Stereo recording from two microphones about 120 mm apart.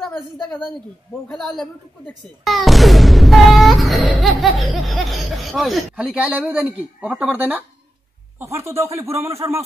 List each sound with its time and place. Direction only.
0.0 s speech: 5° left (ahead or behind); by 7.6 s 15° right (ahead or behind)
8.4 s speech: 25° right (ahead or behind)